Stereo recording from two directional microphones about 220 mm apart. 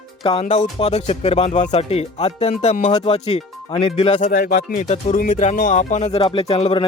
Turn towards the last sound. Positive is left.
turn(degrees=25)  # may be behind; listen again after turning